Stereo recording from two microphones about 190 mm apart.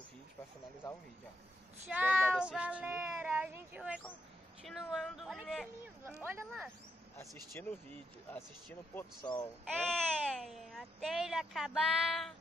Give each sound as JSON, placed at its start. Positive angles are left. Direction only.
{"t": 1.9, "sound": "speech", "side_deg": -5}
{"t": 7.2, "sound": "speech", "side_deg": 10}
{"t": 9.2, "sound": "speech", "side_deg": 20}
{"t": 9.8, "sound": "speech", "side_deg": 0}